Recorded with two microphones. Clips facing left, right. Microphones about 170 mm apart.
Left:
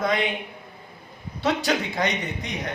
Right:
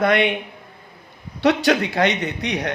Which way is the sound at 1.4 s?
70° right (ahead or behind).